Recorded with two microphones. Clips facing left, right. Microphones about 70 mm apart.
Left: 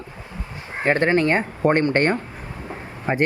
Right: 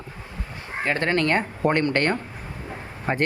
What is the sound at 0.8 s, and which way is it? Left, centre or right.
Speech, left.